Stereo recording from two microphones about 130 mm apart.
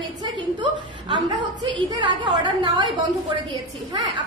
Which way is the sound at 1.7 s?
40° right (ahead or behind).